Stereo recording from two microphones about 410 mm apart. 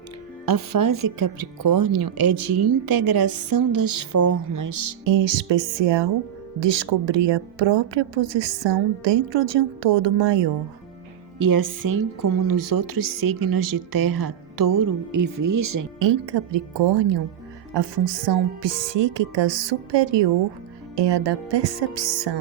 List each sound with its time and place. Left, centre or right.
0.4 s speech: right
5.0 s speech: right
11.3 s speech: right
16.0 s speech: right